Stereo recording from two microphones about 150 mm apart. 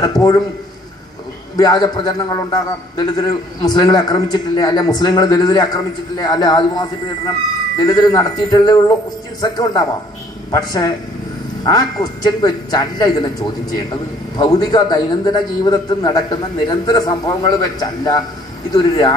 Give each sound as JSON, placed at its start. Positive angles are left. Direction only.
{"t": 0.0, "sound": "a man's voice", "side_deg": 25}
{"t": 1.6, "sound": "a man's voice", "side_deg": 25}
{"t": 14.3, "sound": "a man's voice", "side_deg": 25}